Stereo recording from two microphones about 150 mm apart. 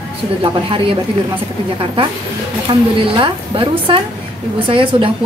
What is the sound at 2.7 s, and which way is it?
Speech, 35° right (ahead or behind).